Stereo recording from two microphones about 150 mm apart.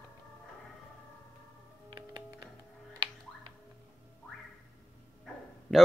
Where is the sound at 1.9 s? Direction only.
30° right (ahead or behind).